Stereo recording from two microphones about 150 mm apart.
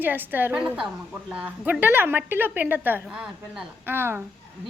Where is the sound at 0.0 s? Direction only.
10° right (ahead or behind).